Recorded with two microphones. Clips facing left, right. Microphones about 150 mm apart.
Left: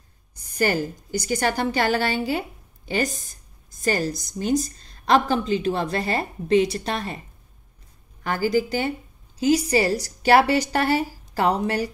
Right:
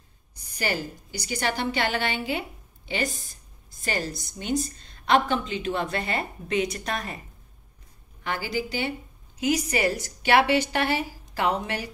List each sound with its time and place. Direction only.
0.4 s a woman's voice: 45° left (ahead or behind); by 7.2 s 30° left (ahead or behind)
8.2 s a woman's voice: 45° left (ahead or behind)
9.4 s a woman's voice: 30° left (ahead or behind)